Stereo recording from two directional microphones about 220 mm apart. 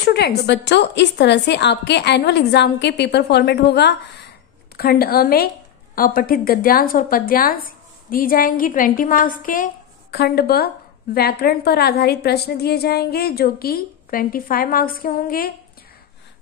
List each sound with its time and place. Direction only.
0.0 s a woman's voice: 45° left (ahead or behind)